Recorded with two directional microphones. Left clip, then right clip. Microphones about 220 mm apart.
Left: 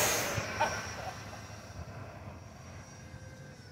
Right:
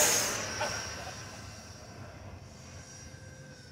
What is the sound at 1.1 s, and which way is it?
Vehicle, 10° right (ahead or behind).